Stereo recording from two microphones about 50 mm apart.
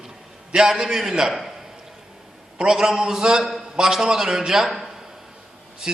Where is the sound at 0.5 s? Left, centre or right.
Centre.